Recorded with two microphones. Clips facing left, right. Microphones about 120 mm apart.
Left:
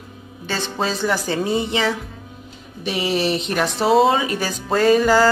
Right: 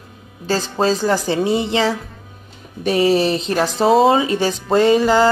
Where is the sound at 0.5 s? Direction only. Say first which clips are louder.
Right 6 dB; 35° right (ahead or behind).